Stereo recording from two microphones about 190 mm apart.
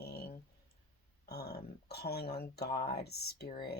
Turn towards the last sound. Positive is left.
turn(degrees=55)  # may be behind; listen again after turning